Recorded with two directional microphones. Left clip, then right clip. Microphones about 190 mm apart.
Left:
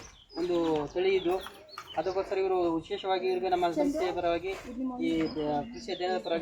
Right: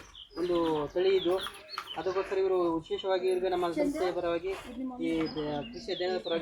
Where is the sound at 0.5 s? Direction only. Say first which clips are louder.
Even; 20° left (ahead or behind).